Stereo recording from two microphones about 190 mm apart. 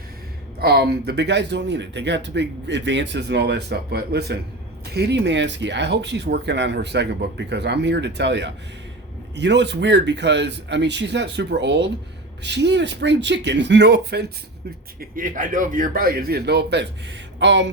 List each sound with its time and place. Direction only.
0.6 s speech: 55° right (ahead or behind)
15.1 s a man's voice: 45° right (ahead or behind); by 16.8 s 60° right (ahead or behind)
17.4 s a sound: 70° right (ahead or behind)